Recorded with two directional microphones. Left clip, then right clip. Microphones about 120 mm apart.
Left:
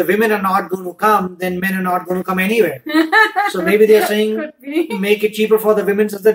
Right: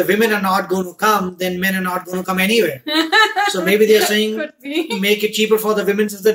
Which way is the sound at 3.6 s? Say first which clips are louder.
Left 3 dB; 5° right (ahead or behind).